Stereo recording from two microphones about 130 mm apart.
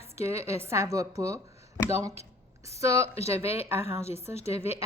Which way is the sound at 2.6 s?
25° right (ahead or behind).